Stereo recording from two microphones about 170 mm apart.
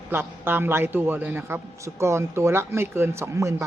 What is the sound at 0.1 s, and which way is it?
Speech, 15° right (ahead or behind).